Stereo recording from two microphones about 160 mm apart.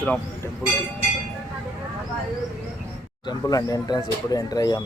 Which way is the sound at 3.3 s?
25° left (ahead or behind).